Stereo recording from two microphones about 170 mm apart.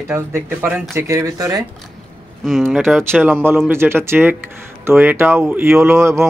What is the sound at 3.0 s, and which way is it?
Speech, 10° right (ahead or behind).